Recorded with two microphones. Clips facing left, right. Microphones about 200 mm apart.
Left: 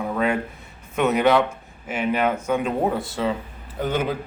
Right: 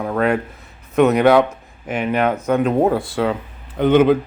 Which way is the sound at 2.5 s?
60° right (ahead or behind).